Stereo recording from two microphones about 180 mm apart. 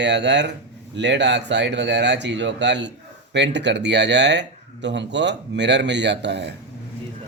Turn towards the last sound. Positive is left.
turn(degrees=-70)  # may be behind; listen again after turning